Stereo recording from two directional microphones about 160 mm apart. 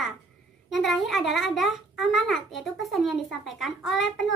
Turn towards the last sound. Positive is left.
turn(degrees=0)  # may be behind; listen again after turning